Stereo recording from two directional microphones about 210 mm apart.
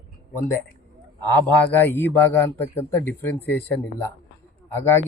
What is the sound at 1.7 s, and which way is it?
Speech, 10° left (ahead or behind).